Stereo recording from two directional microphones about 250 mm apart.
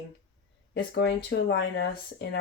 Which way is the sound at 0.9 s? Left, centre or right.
Left.